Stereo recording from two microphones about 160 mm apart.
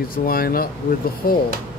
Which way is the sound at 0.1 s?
65° left (ahead or behind).